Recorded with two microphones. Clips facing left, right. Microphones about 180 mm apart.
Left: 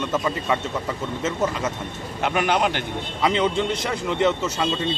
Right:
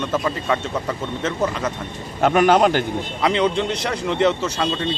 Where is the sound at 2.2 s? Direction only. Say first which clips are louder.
Right 7 dB; 40° right (ahead or behind).